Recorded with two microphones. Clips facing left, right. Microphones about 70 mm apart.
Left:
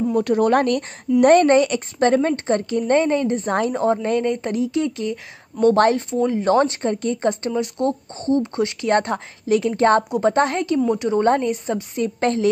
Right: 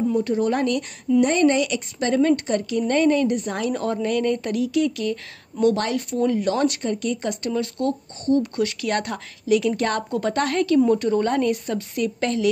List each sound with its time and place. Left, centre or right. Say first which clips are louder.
0.1 s speech: left 4 dB; left
3.7 s speech: left 4 dB; left
6.1 s speech: left 1 dB; left
6.4 s speech: left 4 dB; left